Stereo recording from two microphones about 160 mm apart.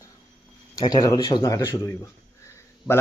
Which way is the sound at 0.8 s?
25° left (ahead or behind).